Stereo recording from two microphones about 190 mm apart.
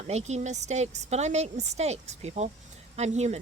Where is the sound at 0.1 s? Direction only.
35° right (ahead or behind).